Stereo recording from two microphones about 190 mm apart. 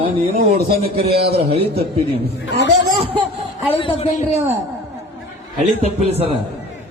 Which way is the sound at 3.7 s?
30° left (ahead or behind).